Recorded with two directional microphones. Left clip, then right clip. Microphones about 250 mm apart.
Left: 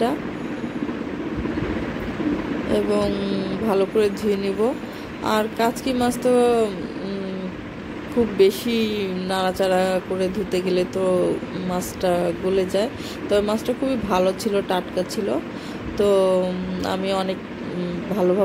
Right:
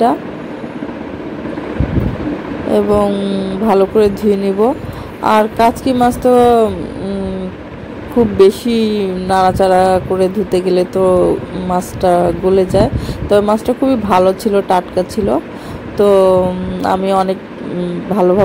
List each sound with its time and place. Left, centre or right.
2.7 s speech: centre
8.4 s speech: centre